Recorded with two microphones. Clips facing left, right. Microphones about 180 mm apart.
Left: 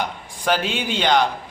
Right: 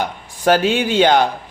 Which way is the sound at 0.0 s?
45° right (ahead or behind).